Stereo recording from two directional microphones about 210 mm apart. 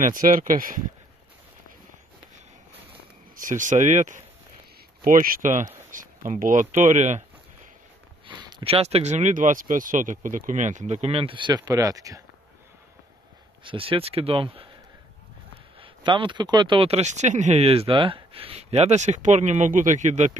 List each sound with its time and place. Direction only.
0.0 s speech: 40° right (ahead or behind)
3.3 s speech: 40° right (ahead or behind)
8.3 s speech: 20° right (ahead or behind)
13.7 s speech: 25° right (ahead or behind)
15.8 s speech: 25° right (ahead or behind)